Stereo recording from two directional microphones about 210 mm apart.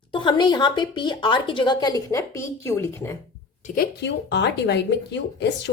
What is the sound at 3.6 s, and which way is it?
A woman's voice, 45° left (ahead or behind).